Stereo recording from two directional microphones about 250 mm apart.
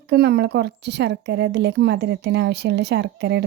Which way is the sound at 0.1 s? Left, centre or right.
Right.